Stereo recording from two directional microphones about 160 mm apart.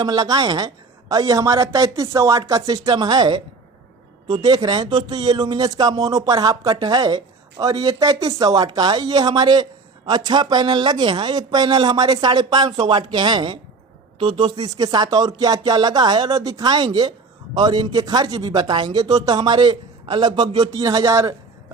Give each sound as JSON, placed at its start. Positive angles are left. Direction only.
{"t": 0.0, "sound": "speech", "side_deg": -25}